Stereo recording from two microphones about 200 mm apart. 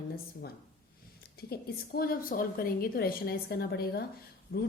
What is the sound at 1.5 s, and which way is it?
A woman's voice, 50° left (ahead or behind).